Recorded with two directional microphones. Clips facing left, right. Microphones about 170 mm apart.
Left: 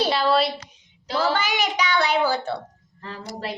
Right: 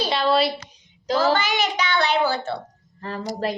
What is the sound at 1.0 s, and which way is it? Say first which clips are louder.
Speech: right 3 dB; 40° right (ahead or behind).